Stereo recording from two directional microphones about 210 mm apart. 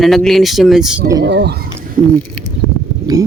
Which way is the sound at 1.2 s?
55° right (ahead or behind).